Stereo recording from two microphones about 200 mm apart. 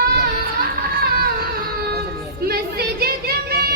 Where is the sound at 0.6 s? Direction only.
50° right (ahead or behind).